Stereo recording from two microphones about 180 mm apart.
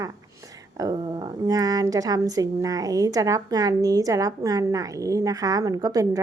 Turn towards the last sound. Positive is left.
turn(degrees=-20)  # may be behind; listen again after turning